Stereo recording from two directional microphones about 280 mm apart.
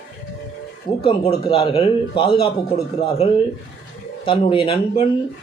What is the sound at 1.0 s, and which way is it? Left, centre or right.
Speech, centre.